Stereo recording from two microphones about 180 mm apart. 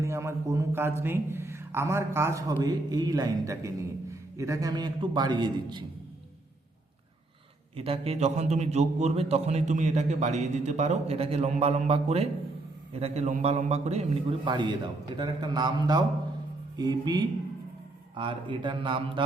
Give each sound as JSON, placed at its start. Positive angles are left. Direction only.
{"t": 0.0, "sound": "a man's voice", "side_deg": -15}
{"t": 7.8, "sound": "a man's voice", "side_deg": -35}